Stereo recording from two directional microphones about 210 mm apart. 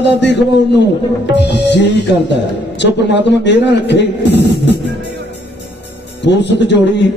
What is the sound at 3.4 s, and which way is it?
A man's voice, 55° left (ahead or behind).